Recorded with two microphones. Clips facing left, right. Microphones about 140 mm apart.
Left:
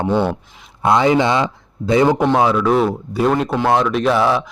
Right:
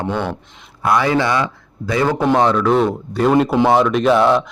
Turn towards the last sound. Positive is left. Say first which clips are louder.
# right 2 dB
turn(degrees=0)  # may be behind; listen again after turning